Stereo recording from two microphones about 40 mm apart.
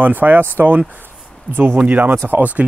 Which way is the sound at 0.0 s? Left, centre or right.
Right.